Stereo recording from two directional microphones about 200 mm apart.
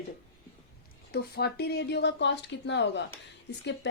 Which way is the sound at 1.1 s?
55° left (ahead or behind).